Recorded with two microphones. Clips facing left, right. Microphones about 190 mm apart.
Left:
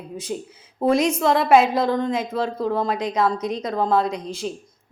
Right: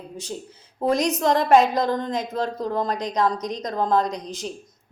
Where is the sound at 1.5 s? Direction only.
5° left (ahead or behind).